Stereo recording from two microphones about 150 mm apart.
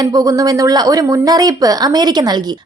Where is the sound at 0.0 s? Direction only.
25° right (ahead or behind).